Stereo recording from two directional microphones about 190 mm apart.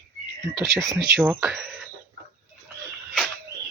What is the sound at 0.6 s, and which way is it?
Speech, 15° right (ahead or behind).